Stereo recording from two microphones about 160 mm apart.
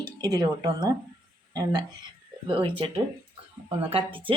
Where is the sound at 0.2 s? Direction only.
25° right (ahead or behind).